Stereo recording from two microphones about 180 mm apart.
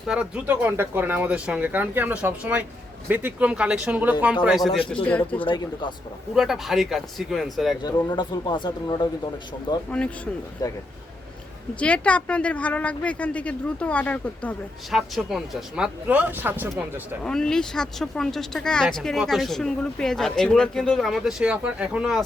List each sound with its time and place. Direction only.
0.1 s speech: 5° right (ahead or behind)
5.4 s speech: 30° left (ahead or behind)
6.3 s speech: centre (ahead or behind)
7.8 s speech: 20° left (ahead or behind)
11.8 s speech: 5° left (ahead or behind); by 17.2 s 10° right (ahead or behind)
17.2 s speech: 5° left (ahead or behind)